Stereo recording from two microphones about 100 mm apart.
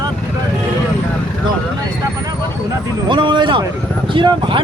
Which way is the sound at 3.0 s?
50° right (ahead or behind).